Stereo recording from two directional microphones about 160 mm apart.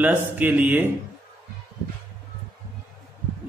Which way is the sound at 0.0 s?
10° right (ahead or behind).